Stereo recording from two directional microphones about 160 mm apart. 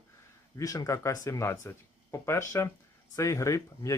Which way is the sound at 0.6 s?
20° left (ahead or behind).